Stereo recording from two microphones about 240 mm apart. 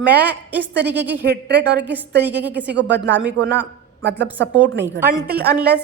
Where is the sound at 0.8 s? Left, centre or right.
Right.